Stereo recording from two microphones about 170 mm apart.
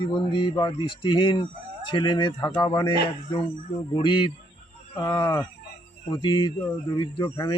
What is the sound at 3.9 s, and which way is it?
A man's voice, 25° left (ahead or behind).